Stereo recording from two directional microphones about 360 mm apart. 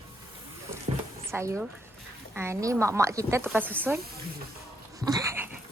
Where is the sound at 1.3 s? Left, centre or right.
Centre.